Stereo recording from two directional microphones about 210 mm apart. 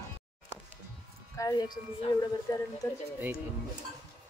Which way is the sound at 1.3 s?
15° left (ahead or behind).